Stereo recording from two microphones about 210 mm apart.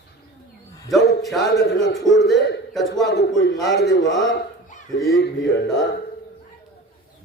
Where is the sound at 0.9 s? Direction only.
Centre (ahead or behind).